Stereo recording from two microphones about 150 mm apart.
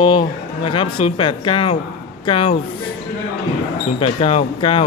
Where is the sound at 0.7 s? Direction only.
35° left (ahead or behind).